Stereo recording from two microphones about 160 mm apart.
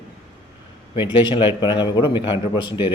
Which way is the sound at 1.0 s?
30° left (ahead or behind).